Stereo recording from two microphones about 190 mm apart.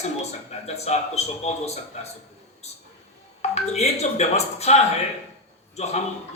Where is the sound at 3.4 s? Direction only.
35° left (ahead or behind).